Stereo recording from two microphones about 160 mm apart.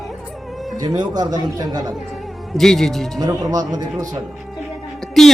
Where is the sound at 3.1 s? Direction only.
25° right (ahead or behind).